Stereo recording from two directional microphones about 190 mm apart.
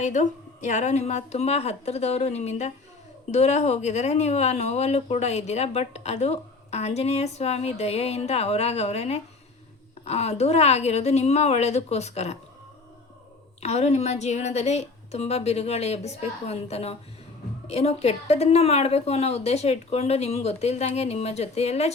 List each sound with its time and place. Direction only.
0.0 s speech: 40° left (ahead or behind)
13.6 s speech: 35° left (ahead or behind)